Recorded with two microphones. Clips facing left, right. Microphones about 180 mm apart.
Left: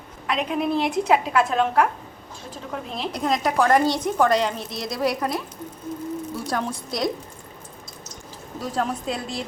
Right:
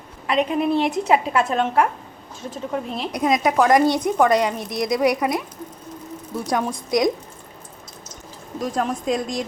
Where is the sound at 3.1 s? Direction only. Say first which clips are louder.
Right 4 dB; 15° right (ahead or behind).